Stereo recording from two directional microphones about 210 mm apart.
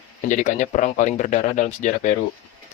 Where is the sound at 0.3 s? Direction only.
35° left (ahead or behind).